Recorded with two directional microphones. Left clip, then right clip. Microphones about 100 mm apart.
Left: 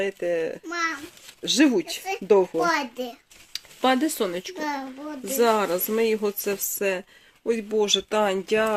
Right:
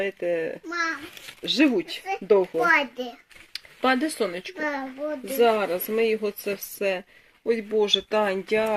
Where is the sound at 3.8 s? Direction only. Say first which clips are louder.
Left 1 dB; 40° left (ahead or behind).